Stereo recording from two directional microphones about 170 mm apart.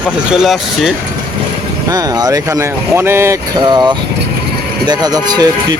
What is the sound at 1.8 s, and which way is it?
Speech, 20° right (ahead or behind).